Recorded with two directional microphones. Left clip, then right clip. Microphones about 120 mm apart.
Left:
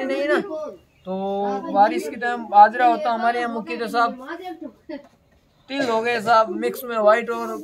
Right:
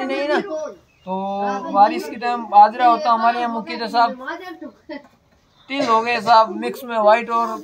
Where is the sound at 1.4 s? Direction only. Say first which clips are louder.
Right 3 dB; 20° left (ahead or behind).